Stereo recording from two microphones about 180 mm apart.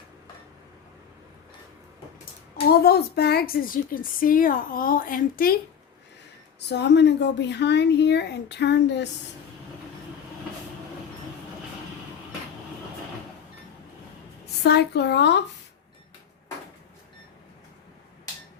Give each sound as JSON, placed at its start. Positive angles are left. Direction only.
{"t": 2.6, "sound": "speech", "side_deg": 60}
{"t": 6.7, "sound": "speech", "side_deg": 70}
{"t": 14.4, "sound": "speech", "side_deg": 65}